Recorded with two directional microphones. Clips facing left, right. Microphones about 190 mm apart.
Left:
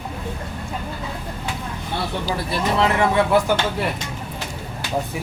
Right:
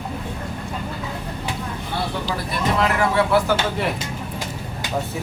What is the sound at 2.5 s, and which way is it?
Speech, 25° left (ahead or behind).